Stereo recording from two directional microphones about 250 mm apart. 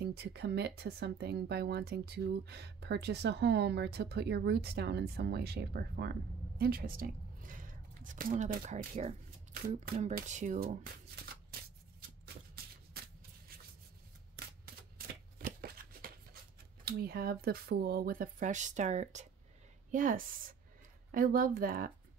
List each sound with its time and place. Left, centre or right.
0.0 s speech: right
14.3 s shuffling cards: right
16.8 s speech: right